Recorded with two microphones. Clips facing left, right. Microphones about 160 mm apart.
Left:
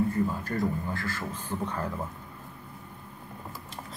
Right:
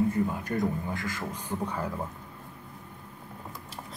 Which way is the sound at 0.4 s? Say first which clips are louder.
Even; 20° right (ahead or behind).